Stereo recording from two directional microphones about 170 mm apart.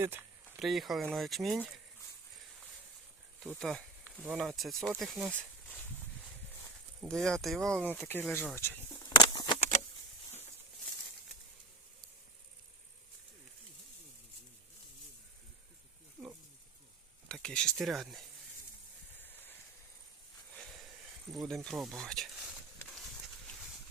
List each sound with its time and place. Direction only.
0.0 s a sound: 10° right (ahead or behind)
0.6 s speech: centre (ahead or behind)
3.4 s speech: centre (ahead or behind)
7.0 s speech: 5° left (ahead or behind)
8.5 s a sound: 15° left (ahead or behind)
16.2 s wild animals: 5° right (ahead or behind)
17.2 s speech: 5° left (ahead or behind)
21.3 s snake: centre (ahead or behind)
23.5 s horse: centre (ahead or behind)